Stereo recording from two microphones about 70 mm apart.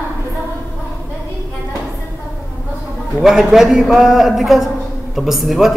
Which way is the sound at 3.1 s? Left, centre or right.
Centre.